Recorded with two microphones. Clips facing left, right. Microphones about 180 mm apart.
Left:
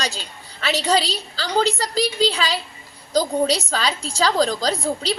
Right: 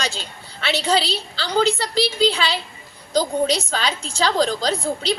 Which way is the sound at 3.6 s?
35° left (ahead or behind).